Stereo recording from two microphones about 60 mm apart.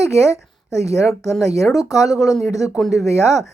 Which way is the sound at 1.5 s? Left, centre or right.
Left.